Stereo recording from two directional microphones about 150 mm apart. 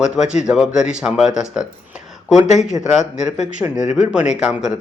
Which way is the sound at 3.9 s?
5° right (ahead or behind).